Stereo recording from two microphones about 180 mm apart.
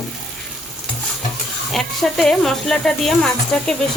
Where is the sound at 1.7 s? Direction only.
Centre (ahead or behind).